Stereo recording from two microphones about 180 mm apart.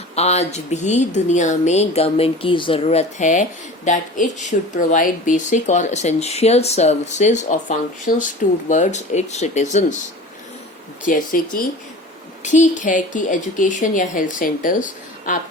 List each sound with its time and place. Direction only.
0.2 s speech: 35° left (ahead or behind)
11.0 s a woman's voice: 50° left (ahead or behind)